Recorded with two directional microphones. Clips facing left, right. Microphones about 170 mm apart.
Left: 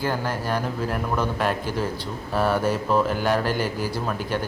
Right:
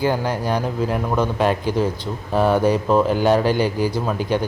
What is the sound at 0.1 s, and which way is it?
Speech, 15° right (ahead or behind).